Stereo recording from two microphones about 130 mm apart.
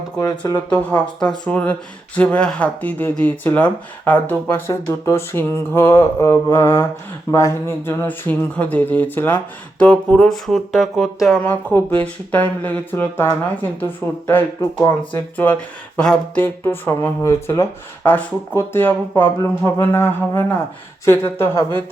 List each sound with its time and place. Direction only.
0.2 s speech: 25° left (ahead or behind)
0.7 s speech: 10° left (ahead or behind)
11.4 s speech: 10° left (ahead or behind)